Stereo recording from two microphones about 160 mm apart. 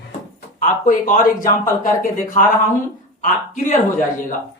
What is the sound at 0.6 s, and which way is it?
A man's voice, 55° left (ahead or behind).